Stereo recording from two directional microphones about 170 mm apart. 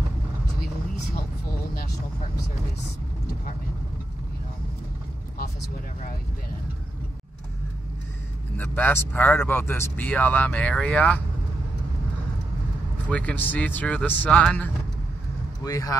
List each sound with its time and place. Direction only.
8.5 s speech: 10° left (ahead or behind)
13.1 s speech: 10° left (ahead or behind)
15.6 s speech: 20° left (ahead or behind)